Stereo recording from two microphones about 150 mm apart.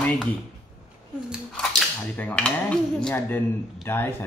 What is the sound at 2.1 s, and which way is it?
Dishes, 10° left (ahead or behind).